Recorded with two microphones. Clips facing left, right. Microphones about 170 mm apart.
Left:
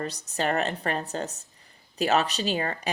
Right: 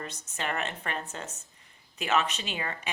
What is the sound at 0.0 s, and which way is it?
Speech, 35° left (ahead or behind).